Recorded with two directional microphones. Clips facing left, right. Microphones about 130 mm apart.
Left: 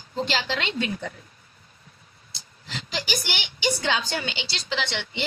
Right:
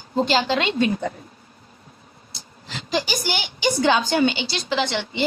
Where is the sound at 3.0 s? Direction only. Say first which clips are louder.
Right 6 dB; 45° right (ahead or behind).